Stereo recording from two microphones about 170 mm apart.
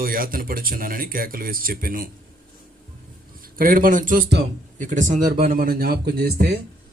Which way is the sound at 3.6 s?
55° right (ahead or behind).